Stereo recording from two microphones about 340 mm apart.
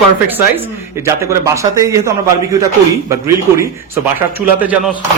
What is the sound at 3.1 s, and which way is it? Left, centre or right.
A man's voice, centre.